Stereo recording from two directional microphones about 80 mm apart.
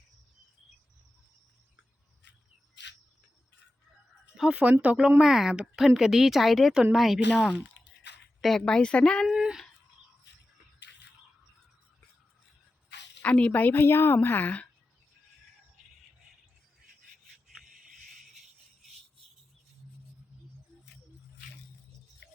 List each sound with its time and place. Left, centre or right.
4.4 s speech: centre
9.2 s speech: centre
13.2 s a woman's voice: centre
17.6 s a sound: centre